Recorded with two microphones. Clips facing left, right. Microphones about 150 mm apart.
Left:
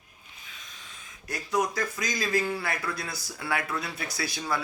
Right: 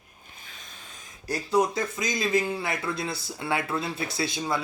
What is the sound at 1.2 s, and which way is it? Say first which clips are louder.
Speech: right 4 dB; 30° right (ahead or behind).